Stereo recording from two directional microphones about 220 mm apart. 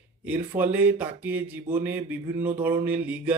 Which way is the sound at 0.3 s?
10° right (ahead or behind).